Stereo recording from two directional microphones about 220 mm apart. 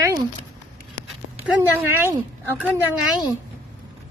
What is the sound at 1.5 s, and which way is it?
A woman's voice, 10° right (ahead or behind).